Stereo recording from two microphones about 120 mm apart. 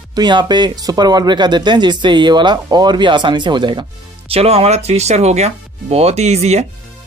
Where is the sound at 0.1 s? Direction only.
35° right (ahead or behind).